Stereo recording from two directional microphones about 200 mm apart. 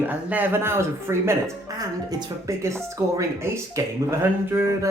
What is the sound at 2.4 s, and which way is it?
Speech, 15° right (ahead or behind).